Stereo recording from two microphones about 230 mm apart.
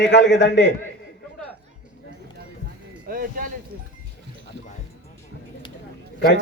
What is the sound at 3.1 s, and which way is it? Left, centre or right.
Speech, right.